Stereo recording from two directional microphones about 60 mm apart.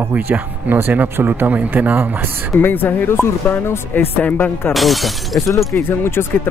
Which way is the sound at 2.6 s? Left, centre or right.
Left.